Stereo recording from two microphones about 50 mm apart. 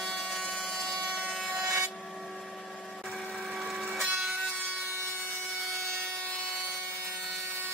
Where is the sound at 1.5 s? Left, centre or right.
Right.